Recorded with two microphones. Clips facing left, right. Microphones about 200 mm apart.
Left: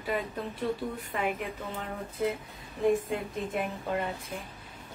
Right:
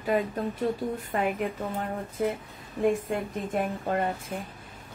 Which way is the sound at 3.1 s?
45° right (ahead or behind).